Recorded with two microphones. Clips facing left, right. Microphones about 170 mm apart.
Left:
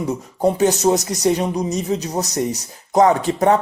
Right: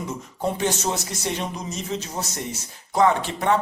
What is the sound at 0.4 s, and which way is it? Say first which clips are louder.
Speech: left 9 dB; 40° left (ahead or behind).